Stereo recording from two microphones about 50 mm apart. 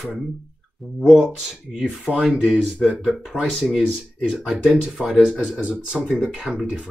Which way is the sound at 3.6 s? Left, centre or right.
Centre.